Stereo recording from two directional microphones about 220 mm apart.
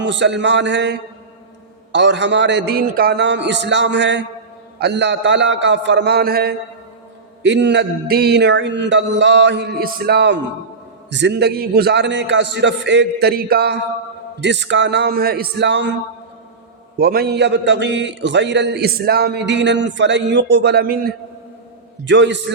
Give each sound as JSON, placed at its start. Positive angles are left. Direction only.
{"t": 0.0, "sound": "a man's voice", "side_deg": -55}
{"t": 17.0, "sound": "a man's voice", "side_deg": -45}
{"t": 22.0, "sound": "a man's voice", "side_deg": -55}